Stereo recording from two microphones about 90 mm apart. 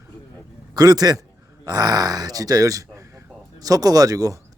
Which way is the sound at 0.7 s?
45° right (ahead or behind).